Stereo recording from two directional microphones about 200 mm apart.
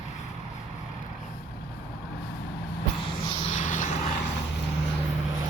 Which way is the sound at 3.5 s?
40° left (ahead or behind).